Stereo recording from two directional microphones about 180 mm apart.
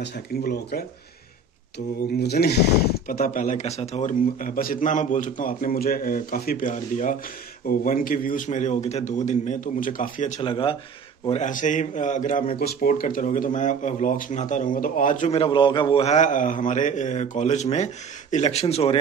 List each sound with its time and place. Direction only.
0.0 s speech: 65° left (ahead or behind)
2.1 s speech: 65° left (ahead or behind)
3.1 s a man's voice: 50° left (ahead or behind)
10.4 s speech: 30° left (ahead or behind)
11.2 s a man's voice: 40° left (ahead or behind)
12.5 s a man's voice: 55° left (ahead or behind)
15.3 s a man's voice: 30° left (ahead or behind)